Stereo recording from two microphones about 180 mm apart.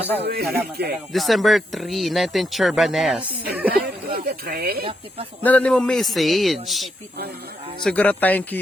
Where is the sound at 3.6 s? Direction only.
55° right (ahead or behind).